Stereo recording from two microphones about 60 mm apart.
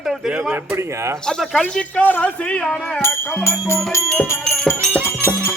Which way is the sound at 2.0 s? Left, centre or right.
Left.